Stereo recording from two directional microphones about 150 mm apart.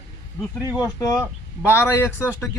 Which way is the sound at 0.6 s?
15° right (ahead or behind).